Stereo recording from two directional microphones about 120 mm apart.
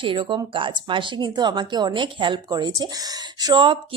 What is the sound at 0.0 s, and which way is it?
Speech, 45° right (ahead or behind).